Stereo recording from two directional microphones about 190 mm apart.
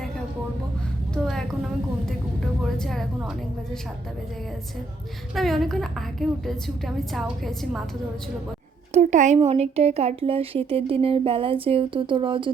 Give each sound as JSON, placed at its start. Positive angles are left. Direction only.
{"t": 1.1, "sound": "a sound", "side_deg": 0}
{"t": 2.7, "sound": "a woman's voice", "side_deg": 0}
{"t": 5.3, "sound": "a woman's voice", "side_deg": 0}
{"t": 8.9, "sound": "speech", "side_deg": -40}